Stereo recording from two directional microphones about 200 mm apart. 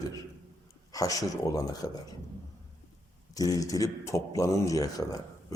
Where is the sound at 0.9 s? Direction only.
15° left (ahead or behind).